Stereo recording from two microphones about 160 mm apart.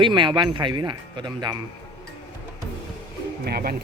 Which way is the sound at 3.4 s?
75° right (ahead or behind).